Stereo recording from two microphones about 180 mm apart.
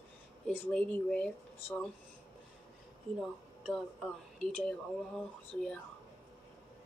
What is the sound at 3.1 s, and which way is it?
Speech, centre (ahead or behind).